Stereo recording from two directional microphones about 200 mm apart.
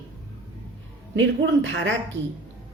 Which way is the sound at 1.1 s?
70° right (ahead or behind).